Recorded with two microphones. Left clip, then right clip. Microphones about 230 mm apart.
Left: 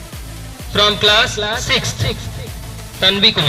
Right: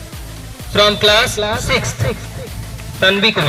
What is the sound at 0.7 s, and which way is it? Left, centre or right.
A man's voice, right.